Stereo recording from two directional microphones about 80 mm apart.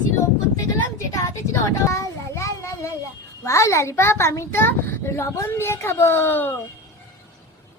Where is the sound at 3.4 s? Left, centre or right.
Left.